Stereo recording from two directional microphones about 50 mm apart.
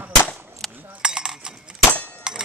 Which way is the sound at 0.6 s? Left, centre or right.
Centre.